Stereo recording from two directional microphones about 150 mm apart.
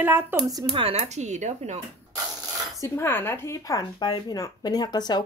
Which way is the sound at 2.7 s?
15° left (ahead or behind).